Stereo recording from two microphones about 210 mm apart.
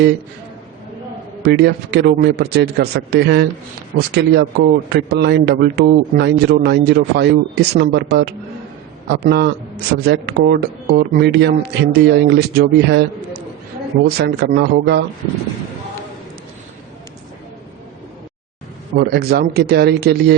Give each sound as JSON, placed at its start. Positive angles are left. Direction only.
{"t": 1.4, "sound": "speech", "side_deg": -50}
{"t": 9.0, "sound": "speech", "side_deg": -50}
{"t": 18.9, "sound": "speech", "side_deg": -50}